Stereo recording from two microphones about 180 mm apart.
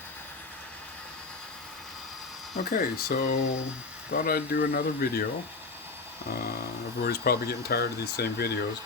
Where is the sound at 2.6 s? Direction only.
50° left (ahead or behind).